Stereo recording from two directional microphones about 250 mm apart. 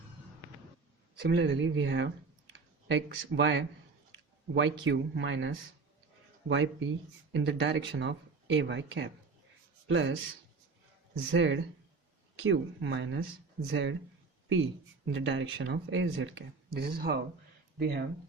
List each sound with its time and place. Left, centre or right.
1.2 s speech: right
11.3 s speech: right